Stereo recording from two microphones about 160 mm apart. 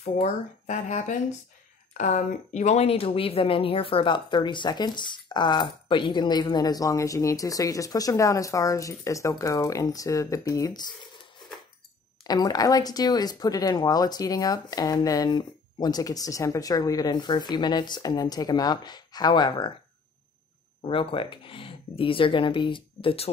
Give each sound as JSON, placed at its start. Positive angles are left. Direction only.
{"t": 0.0, "sound": "speech", "side_deg": 45}
{"t": 12.2, "sound": "speech", "side_deg": 25}
{"t": 20.8, "sound": "speech", "side_deg": 35}